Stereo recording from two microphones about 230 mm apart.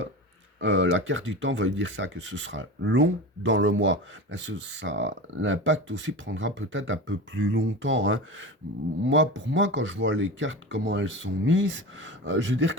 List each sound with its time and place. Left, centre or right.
0.6 s speech: right